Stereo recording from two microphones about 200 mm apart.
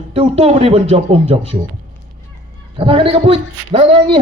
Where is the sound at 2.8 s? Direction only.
25° right (ahead or behind).